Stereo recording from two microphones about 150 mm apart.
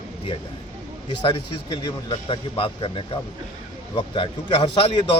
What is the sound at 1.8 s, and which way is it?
A man's voice, 35° left (ahead or behind).